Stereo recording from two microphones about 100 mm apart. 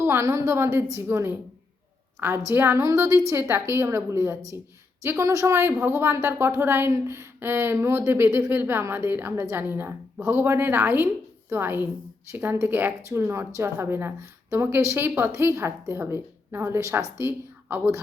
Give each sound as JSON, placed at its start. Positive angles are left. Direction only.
{"t": 0.0, "sound": "speech", "side_deg": -25}
{"t": 2.5, "sound": "speech", "side_deg": -25}